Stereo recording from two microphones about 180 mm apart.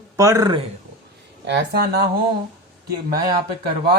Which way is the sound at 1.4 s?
70° right (ahead or behind).